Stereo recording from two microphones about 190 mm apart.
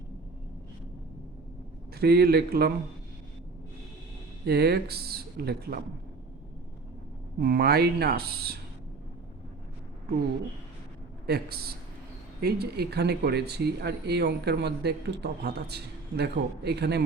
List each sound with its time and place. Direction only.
2.0 s speech: 55° right (ahead or behind)
4.4 s speech: 55° right (ahead or behind)
7.3 s speech: 55° right (ahead or behind)
11.3 s speech: 55° right (ahead or behind)